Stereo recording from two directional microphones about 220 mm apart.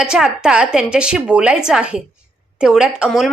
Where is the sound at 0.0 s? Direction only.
5° right (ahead or behind).